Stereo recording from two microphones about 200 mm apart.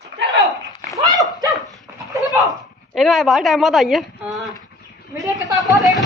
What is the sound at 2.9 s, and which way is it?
A woman's voice, centre (ahead or behind).